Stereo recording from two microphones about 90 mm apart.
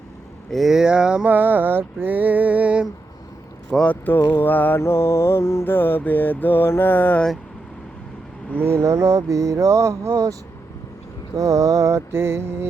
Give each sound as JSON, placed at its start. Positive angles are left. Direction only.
{"t": 0.5, "sound": "a sound", "side_deg": -5}
{"t": 3.7, "sound": "speech", "side_deg": 10}
{"t": 4.3, "sound": "mantra", "side_deg": 20}
{"t": 8.5, "sound": "speech", "side_deg": -30}
{"t": 11.3, "sound": "speech", "side_deg": -35}